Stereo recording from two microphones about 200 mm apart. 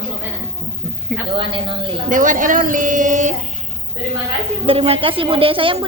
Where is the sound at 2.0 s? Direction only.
40° right (ahead or behind).